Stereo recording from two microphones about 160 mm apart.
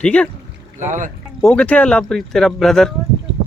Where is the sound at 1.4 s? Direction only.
5° left (ahead or behind).